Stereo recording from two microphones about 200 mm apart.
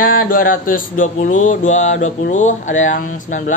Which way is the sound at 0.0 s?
45° left (ahead or behind).